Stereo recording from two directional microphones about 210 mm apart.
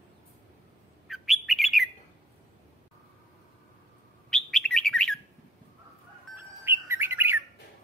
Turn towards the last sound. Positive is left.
turn(degrees=-10)  # may be behind; listen again after turning